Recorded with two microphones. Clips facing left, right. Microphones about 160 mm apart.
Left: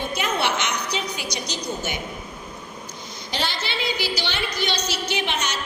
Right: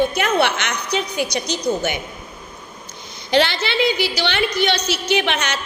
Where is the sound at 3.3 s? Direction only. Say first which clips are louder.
Right 10 dB; 70° right (ahead or behind).